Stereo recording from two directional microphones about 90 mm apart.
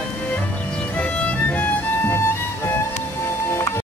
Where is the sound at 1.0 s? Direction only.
15° left (ahead or behind).